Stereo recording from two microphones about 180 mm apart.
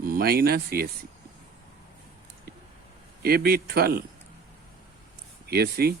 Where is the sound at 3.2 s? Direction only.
55° right (ahead or behind).